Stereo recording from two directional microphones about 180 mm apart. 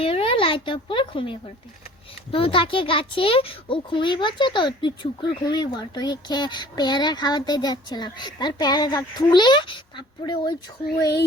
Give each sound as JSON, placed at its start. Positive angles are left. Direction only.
{"t": 0.0, "sound": "speech", "side_deg": 30}